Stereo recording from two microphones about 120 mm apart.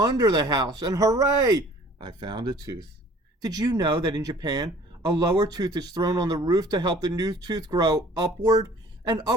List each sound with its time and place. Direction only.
0.0 s speech: 35° right (ahead or behind)